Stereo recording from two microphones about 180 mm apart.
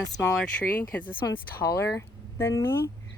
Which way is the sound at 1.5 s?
60° left (ahead or behind).